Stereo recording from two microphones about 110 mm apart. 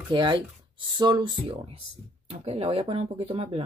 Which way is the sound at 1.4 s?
60° right (ahead or behind).